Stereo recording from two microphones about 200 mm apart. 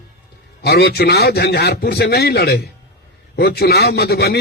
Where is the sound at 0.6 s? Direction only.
55° left (ahead or behind).